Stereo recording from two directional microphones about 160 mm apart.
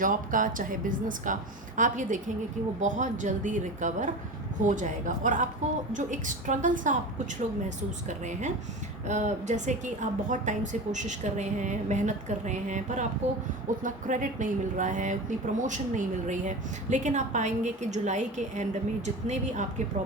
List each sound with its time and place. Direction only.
0.0 s a woman's voice: 55° right (ahead or behind)
8.3 s a woman's voice: 50° right (ahead or behind)